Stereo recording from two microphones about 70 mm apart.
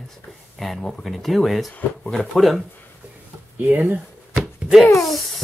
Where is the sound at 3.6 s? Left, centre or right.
Right.